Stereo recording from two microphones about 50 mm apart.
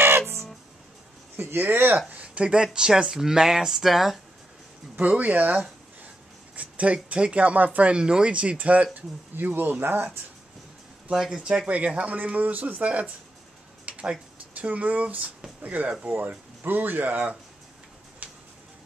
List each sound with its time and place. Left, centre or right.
1.3 s speech: right
2.0 s speech: right; by 4.2 s centre
4.9 s speech: right
7.9 s speech: centre
9.3 s speech: right
11.1 s speech: centre
11.4 s speech: right
13.8 s a sound: right
14.5 s speech: right
18.2 s tick-tock: right